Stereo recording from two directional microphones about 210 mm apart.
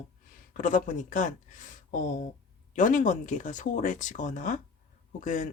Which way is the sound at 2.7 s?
40° left (ahead or behind).